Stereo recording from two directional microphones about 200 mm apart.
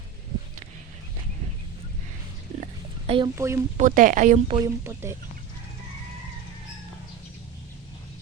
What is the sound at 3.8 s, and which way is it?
Speech, 40° right (ahead or behind).